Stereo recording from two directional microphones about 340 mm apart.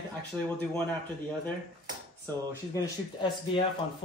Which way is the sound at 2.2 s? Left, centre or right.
Centre.